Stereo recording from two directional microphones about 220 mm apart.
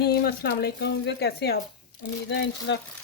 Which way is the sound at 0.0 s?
45° left (ahead or behind).